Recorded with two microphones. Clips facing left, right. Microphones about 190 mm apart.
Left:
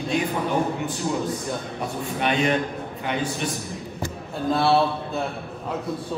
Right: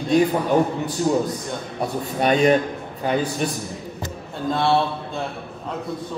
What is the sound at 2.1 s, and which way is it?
Speech, 40° right (ahead or behind).